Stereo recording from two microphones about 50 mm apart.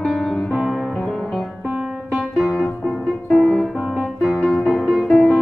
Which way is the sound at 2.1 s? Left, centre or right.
Centre.